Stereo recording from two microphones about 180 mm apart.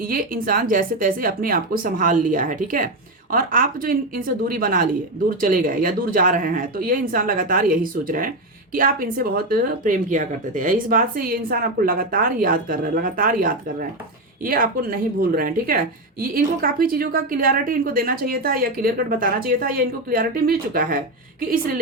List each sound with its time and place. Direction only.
0.0 s speech: 50° right (ahead or behind)